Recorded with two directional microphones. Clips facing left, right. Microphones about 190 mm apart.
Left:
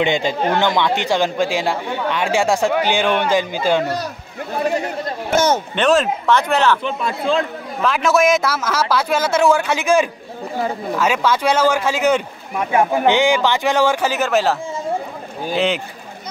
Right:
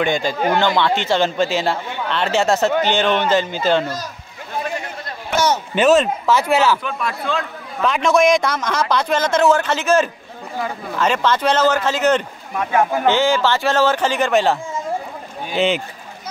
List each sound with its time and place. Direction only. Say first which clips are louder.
0.0 s a man's voice: left 1 dB; 20° left (ahead or behind)
3.8 s speech: left 4 dB; 65° left (ahead or behind)
5.3 s a sound: left 2 dB; 50° left (ahead or behind)
5.8 s speech: right 4 dB; 5° right (ahead or behind)
6.8 s a man's voice: left 3 dB; 25° left (ahead or behind)
7.8 s speech: right 1 dB; 5° left (ahead or behind)
10.6 s a man's voice: left 4 dB; 25° left (ahead or behind)
11.0 s speech: right 1 dB; 10° left (ahead or behind)